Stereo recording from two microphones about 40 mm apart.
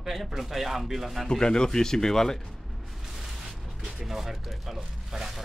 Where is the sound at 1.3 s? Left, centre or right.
Centre.